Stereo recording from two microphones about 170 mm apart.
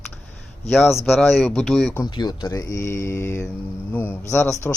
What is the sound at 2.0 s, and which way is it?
A man's voice, 25° left (ahead or behind).